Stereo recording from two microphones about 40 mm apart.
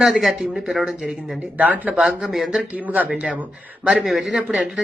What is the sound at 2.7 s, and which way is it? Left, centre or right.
Speech, right.